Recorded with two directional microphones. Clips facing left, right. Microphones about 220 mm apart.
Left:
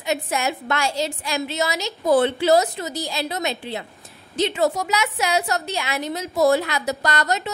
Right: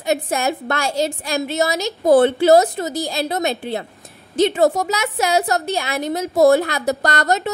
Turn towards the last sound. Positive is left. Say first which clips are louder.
# right 4 dB
turn(degrees=-50)  # may be behind; listen again after turning